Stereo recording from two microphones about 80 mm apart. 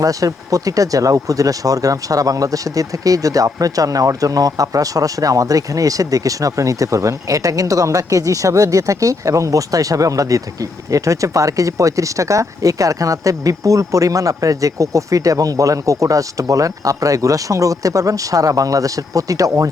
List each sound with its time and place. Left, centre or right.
0.0 s speech: right